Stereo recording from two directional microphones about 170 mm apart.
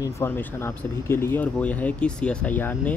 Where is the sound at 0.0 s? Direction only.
15° left (ahead or behind).